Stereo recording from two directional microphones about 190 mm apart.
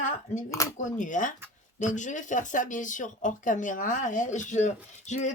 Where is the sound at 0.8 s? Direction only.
40° left (ahead or behind).